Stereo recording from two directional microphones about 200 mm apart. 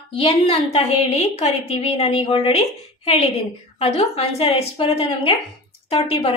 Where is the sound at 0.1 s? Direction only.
30° left (ahead or behind).